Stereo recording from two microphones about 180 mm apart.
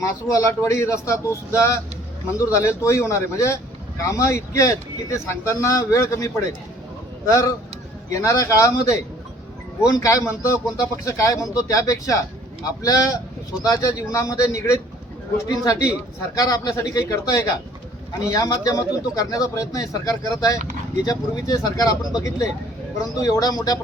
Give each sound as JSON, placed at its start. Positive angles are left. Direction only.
{"t": 0.0, "sound": "a man's voice", "side_deg": 15}